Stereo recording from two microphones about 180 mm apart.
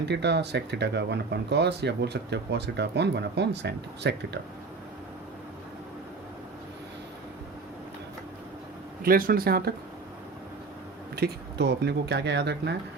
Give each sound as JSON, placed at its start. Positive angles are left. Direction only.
{"t": 0.0, "sound": "speech", "side_deg": -70}
{"t": 9.0, "sound": "speech", "side_deg": -55}
{"t": 11.1, "sound": "speech", "side_deg": -65}